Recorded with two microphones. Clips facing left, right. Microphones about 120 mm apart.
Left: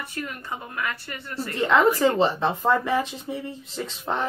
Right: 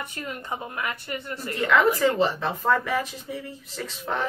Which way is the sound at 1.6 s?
30° left (ahead or behind).